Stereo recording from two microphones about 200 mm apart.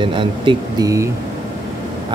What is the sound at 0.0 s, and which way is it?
Speech, 25° right (ahead or behind).